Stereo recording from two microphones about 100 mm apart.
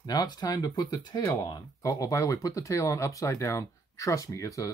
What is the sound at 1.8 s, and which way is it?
Speech, 35° left (ahead or behind).